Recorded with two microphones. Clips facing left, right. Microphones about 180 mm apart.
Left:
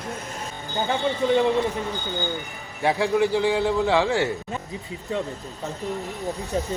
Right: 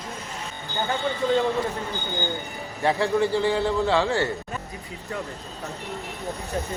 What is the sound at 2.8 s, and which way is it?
A man's voice, 15° left (ahead or behind).